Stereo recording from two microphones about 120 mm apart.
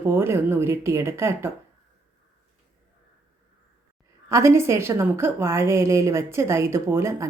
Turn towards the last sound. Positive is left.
turn(degrees=-20)  # may be behind; listen again after turning